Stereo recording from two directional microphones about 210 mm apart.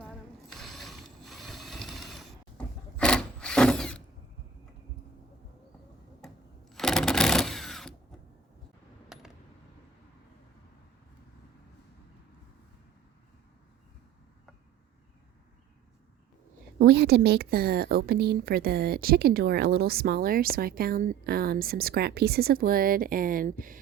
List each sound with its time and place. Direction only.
0.0 s ratchet: centre (ahead or behind)
6.2 s sewing machine: centre (ahead or behind)
9.1 s coin: centre (ahead or behind)
16.7 s a woman's voice: 50° right (ahead or behind)